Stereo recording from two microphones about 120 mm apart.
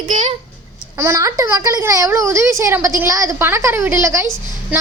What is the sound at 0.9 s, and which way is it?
A woman's voice, 20° right (ahead or behind).